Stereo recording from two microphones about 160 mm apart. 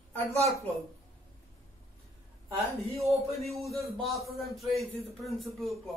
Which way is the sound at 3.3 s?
Centre (ahead or behind).